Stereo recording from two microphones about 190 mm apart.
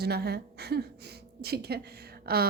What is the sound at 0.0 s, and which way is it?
A woman's voice, 55° right (ahead or behind).